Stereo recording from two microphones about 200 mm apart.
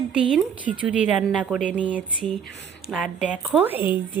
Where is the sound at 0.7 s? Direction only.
35° right (ahead or behind).